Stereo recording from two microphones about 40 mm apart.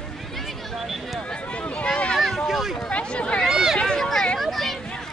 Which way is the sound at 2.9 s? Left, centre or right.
Left.